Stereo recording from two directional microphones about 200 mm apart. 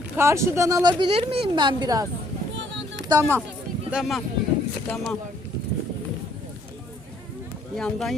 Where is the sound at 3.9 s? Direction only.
Centre (ahead or behind).